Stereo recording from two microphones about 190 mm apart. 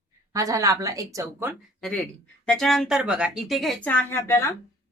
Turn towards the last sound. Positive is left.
turn(degrees=15)  # may be behind; listen again after turning